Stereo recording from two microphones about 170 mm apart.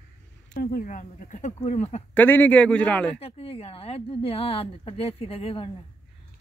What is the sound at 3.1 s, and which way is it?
Speech, 35° left (ahead or behind).